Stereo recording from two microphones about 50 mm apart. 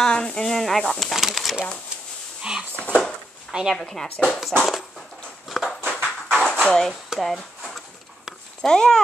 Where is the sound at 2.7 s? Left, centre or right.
Left.